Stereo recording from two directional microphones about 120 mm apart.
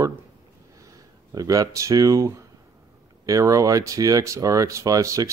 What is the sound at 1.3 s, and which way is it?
Speech, 30° right (ahead or behind).